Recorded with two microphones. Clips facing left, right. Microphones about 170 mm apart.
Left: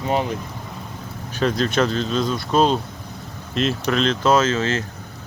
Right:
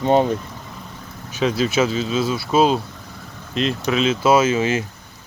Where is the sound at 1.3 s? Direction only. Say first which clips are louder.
Right 1 dB; 5° right (ahead or behind).